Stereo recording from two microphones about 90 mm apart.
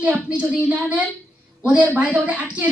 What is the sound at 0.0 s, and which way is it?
Speech, 15° right (ahead or behind).